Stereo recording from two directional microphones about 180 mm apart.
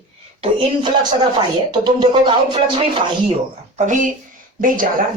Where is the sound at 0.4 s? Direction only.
25° right (ahead or behind).